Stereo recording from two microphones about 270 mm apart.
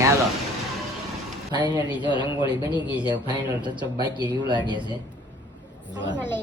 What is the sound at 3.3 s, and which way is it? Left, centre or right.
Speech, centre.